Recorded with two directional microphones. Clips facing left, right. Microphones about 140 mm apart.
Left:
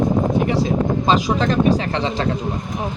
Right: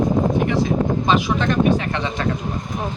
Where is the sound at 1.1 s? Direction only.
35° left (ahead or behind).